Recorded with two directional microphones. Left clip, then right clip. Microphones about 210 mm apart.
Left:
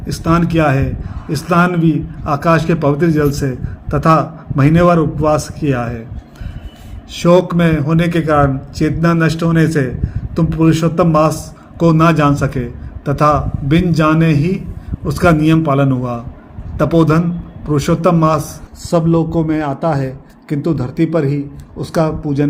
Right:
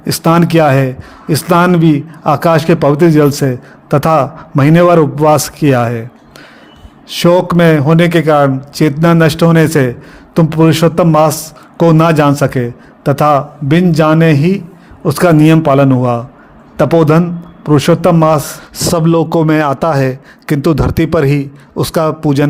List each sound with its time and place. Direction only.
0.1 s a man's voice: 50° right (ahead or behind)
7.1 s a man's voice: 45° right (ahead or behind)